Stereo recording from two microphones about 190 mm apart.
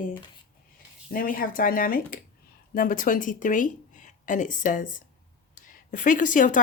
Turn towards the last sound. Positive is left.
turn(degrees=45)  # may be behind; listen again after turning